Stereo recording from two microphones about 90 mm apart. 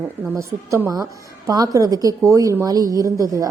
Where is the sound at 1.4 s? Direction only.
45° right (ahead or behind).